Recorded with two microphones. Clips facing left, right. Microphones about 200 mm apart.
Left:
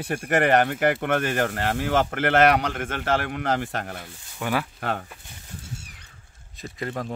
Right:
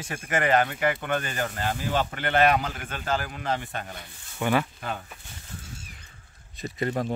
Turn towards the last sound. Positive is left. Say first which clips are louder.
# right 3 dB
turn(degrees=0)  # may be behind; listen again after turning